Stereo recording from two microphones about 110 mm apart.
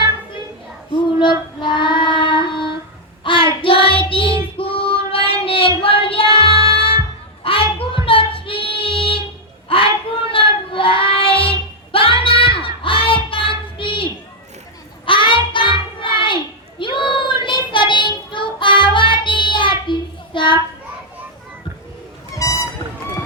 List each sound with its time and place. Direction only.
1.2 s child singing: 45° left (ahead or behind)
22.4 s music: 30° left (ahead or behind)